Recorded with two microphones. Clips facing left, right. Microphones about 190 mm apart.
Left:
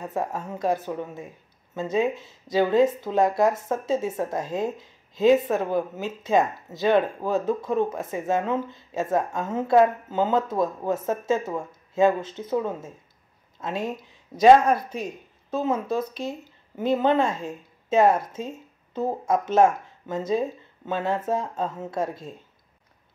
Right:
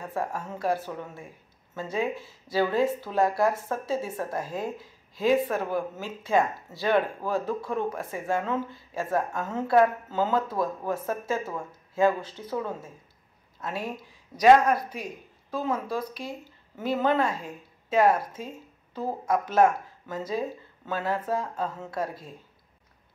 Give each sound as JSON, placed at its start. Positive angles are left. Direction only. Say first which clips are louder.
{"t": 0.0, "sound": "speech", "louder": "left 3 dB", "side_deg": 20}